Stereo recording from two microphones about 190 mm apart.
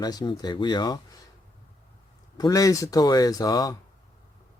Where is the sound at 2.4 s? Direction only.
20° left (ahead or behind).